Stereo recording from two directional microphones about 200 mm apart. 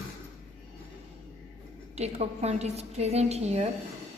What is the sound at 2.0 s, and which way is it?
A woman's voice, 30° right (ahead or behind).